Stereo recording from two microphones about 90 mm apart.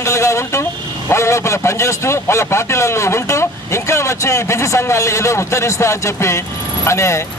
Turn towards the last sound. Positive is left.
turn(degrees=30)  # may be behind; listen again after turning